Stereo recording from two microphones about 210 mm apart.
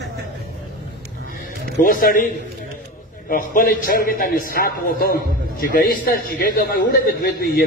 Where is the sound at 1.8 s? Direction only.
40° left (ahead or behind).